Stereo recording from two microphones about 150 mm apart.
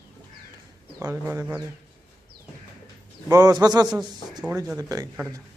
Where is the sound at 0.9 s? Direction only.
20° right (ahead or behind).